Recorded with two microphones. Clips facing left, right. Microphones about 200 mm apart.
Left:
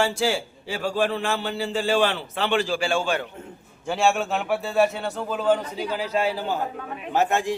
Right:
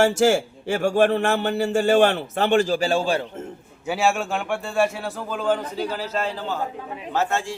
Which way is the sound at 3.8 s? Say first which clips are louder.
Even; 5° right (ahead or behind).